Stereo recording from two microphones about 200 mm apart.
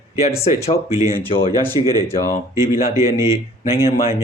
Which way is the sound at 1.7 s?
20° right (ahead or behind).